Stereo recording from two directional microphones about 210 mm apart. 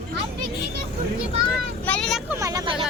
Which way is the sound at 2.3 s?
15° right (ahead or behind).